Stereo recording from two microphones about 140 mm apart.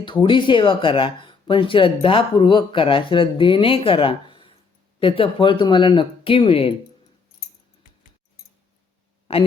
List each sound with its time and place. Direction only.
0.0 s speech: 35° left (ahead or behind)
9.3 s a man's voice: 45° left (ahead or behind)